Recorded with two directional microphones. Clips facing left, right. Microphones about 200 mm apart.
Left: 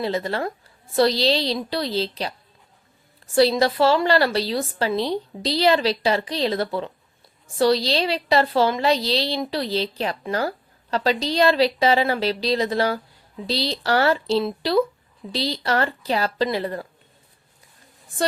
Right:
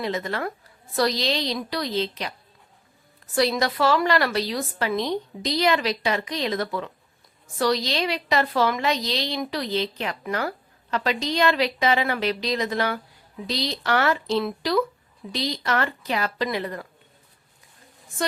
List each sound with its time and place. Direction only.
0.0 s a woman's voice: 30° left (ahead or behind)
3.3 s a woman's voice: 30° left (ahead or behind)